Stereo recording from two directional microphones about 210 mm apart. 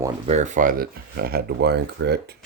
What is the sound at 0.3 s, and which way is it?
Speech, 35° right (ahead or behind).